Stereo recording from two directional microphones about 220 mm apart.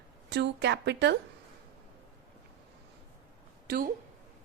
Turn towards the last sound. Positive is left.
turn(degrees=-40)  # may be behind; listen again after turning